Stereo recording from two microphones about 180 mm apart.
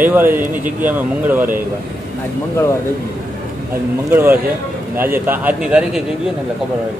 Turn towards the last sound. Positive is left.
turn(degrees=-5)  # may be behind; listen again after turning